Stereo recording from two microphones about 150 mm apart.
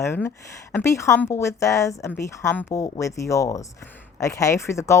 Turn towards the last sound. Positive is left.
turn(degrees=20)  # may be behind; listen again after turning